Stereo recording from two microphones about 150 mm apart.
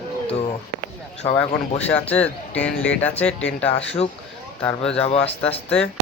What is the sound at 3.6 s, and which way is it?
Speech, 40° left (ahead or behind).